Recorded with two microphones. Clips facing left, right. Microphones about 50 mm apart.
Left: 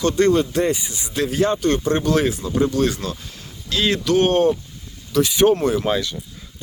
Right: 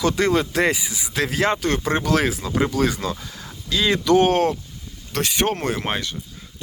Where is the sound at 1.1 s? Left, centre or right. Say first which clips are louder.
Left 2 dB; right.